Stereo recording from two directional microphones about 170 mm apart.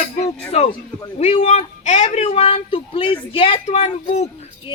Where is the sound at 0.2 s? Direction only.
40° left (ahead or behind).